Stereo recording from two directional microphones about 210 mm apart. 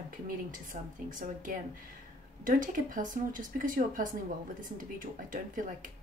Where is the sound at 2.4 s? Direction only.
40° right (ahead or behind).